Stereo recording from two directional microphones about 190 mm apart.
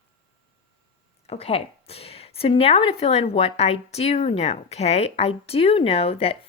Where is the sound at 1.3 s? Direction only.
30° left (ahead or behind).